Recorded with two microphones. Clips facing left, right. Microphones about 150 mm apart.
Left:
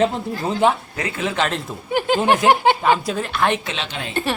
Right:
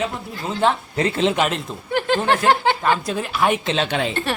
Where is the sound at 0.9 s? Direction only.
25° right (ahead or behind).